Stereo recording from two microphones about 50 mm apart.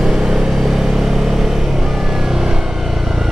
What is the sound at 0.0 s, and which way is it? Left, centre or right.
Vehicle, centre.